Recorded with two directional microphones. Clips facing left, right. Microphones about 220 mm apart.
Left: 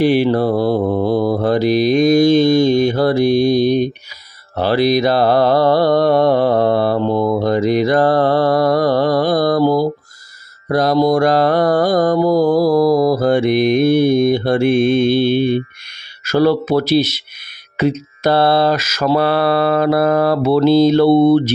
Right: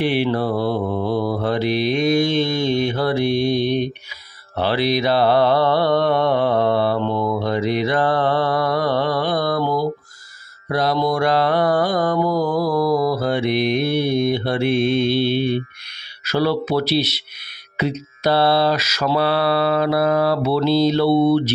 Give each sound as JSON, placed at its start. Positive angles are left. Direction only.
{"t": 0.0, "sound": "mantra", "side_deg": 40}